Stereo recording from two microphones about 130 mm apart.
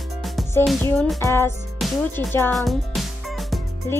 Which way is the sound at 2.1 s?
15° left (ahead or behind).